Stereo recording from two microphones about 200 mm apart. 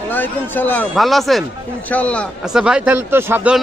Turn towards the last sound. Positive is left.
turn(degrees=-10)  # may be behind; listen again after turning